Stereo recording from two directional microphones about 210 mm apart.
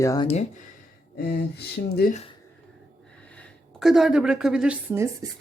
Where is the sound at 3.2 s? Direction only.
5° left (ahead or behind).